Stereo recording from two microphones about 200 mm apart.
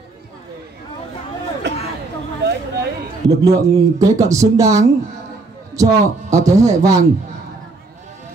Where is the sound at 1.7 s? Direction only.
60° right (ahead or behind).